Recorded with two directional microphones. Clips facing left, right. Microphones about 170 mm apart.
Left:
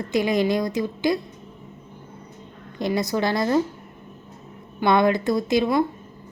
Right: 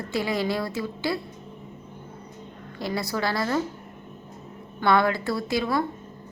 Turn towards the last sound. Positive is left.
turn(degrees=20)  # may be behind; listen again after turning